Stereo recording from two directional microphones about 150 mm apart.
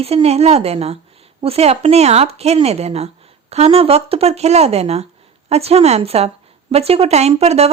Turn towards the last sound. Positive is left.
turn(degrees=-45)  # may be behind; listen again after turning